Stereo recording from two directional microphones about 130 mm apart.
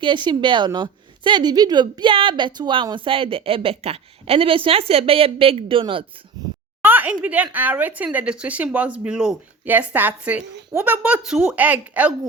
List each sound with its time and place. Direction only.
0.0 s a woman's voice: 40° right (ahead or behind)
6.4 s a sound: 30° right (ahead or behind)
6.8 s speech: 15° right (ahead or behind)